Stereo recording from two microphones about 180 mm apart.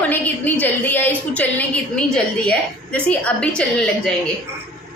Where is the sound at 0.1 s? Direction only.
10° left (ahead or behind).